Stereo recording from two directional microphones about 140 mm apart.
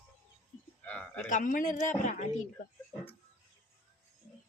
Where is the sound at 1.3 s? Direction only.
70° left (ahead or behind).